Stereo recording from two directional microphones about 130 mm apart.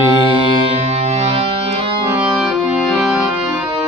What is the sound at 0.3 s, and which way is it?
Music, 45° right (ahead or behind).